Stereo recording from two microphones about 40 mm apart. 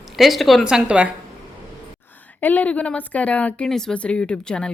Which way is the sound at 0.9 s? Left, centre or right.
Right.